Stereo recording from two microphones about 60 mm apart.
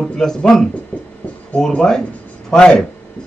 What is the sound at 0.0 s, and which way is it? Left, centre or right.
Speech, centre.